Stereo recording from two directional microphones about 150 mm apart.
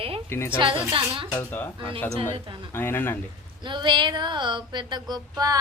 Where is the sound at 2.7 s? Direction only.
15° left (ahead or behind).